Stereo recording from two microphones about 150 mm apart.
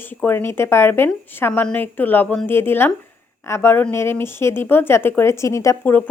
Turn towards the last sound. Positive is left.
turn(degrees=15)  # may be behind; listen again after turning